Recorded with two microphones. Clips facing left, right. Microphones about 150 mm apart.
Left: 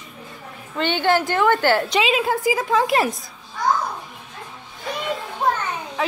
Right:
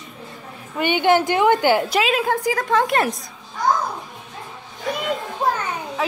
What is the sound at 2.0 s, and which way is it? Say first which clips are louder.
A woman's voice: even; centre (ahead or behind).